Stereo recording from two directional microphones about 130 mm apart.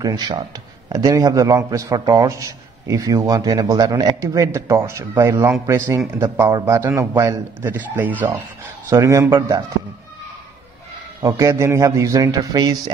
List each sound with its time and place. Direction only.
0.0 s a man's voice: 30° right (ahead or behind); by 8.5 s 15° right (ahead or behind)
8.8 s a man's voice: 25° right (ahead or behind)
11.2 s a man's voice: 25° right (ahead or behind)